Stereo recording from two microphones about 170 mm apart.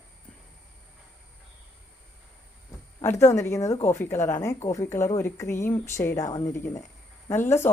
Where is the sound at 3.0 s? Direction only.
15° left (ahead or behind).